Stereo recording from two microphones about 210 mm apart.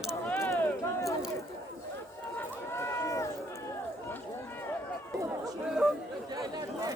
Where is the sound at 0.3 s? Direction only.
15° left (ahead or behind).